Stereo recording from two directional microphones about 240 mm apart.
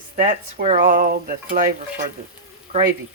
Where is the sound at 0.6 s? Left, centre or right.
Right.